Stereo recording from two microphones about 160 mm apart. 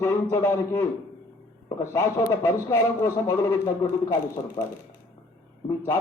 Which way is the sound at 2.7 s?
25° left (ahead or behind).